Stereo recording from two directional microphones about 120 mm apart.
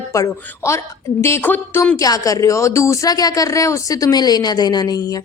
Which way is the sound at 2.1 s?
30° left (ahead or behind).